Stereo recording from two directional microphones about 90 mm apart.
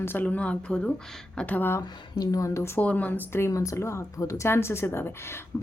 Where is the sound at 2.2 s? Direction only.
40° left (ahead or behind).